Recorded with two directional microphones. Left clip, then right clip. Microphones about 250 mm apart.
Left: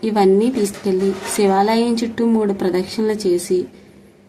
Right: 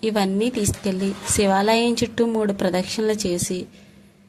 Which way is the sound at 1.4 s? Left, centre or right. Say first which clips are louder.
Left 3 dB; right.